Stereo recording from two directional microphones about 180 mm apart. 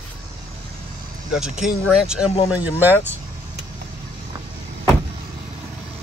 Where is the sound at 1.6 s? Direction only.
5° right (ahead or behind).